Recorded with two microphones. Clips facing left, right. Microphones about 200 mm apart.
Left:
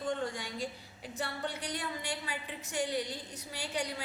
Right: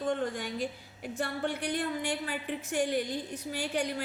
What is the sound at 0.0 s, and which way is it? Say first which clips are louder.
A woman's voice: right 4 dB; 45° right (ahead or behind).